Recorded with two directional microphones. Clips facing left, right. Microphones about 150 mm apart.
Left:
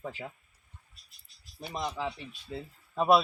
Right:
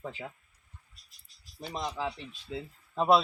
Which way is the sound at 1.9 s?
5° right (ahead or behind).